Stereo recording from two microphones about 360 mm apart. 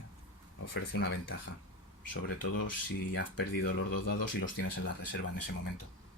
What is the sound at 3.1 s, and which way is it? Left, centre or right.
Speech, left.